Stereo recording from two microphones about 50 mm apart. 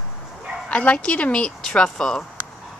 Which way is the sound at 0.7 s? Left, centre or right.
Left.